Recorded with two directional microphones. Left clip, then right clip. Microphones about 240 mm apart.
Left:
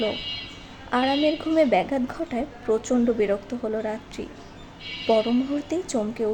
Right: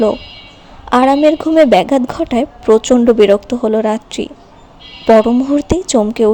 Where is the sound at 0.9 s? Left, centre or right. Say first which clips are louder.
Right 13 dB; right.